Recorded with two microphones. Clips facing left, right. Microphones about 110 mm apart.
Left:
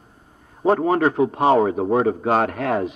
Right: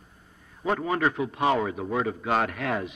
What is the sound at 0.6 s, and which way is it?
A man's voice, 40° left (ahead or behind).